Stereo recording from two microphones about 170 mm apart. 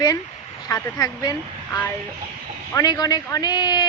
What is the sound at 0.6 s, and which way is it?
Speech, 20° left (ahead or behind).